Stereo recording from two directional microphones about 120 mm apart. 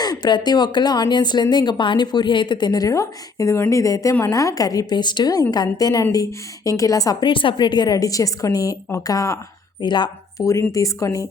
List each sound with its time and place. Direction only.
0.0 s a woman's voice: 35° left (ahead or behind)
10.4 s a woman's voice: 25° left (ahead or behind)